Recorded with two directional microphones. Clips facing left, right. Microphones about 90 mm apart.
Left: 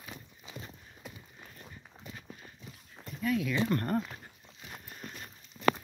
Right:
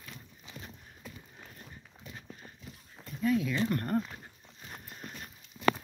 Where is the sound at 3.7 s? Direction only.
5° right (ahead or behind).